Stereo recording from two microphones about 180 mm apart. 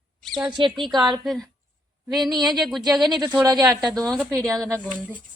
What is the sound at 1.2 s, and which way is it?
Speech, centre (ahead or behind).